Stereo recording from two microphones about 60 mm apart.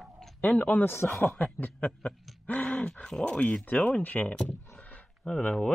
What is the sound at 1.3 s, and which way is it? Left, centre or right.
Speech, left.